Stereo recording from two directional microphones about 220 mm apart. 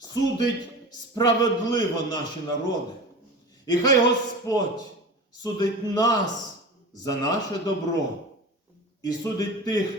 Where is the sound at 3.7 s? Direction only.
15° left (ahead or behind).